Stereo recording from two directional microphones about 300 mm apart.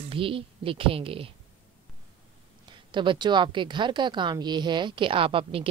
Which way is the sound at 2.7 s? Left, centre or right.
Centre.